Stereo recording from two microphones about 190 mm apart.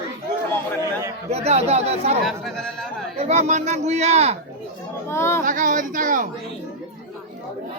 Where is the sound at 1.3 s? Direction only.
35° right (ahead or behind).